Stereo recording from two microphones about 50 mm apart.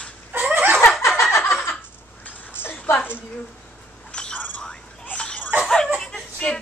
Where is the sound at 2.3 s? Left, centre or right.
Left.